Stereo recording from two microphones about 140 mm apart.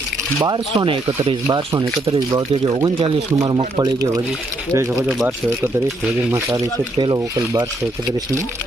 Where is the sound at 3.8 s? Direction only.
30° right (ahead or behind).